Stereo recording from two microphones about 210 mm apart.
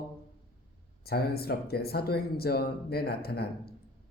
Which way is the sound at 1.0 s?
50° left (ahead or behind).